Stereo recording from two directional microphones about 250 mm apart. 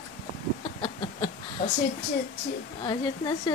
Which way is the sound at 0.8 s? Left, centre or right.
Centre.